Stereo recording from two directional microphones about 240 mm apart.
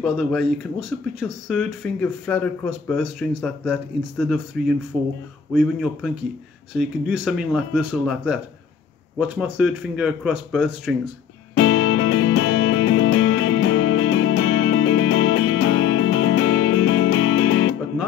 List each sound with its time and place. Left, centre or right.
0.0 s speech: centre
11.5 s music: left